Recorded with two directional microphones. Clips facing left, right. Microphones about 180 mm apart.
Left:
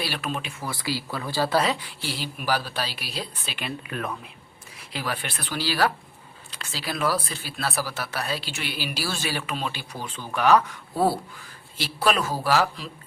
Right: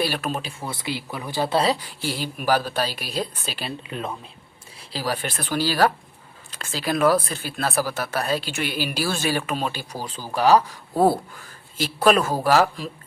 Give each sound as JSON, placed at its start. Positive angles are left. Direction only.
{"t": 0.0, "sound": "speech", "side_deg": -45}
{"t": 0.6, "sound": "speech", "side_deg": -20}
{"t": 3.8, "sound": "speech", "side_deg": -20}
{"t": 4.8, "sound": "speech", "side_deg": -35}
{"t": 11.8, "sound": "speech", "side_deg": -50}